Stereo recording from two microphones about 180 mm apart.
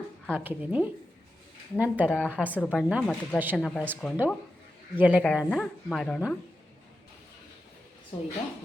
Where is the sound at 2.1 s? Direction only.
10° left (ahead or behind).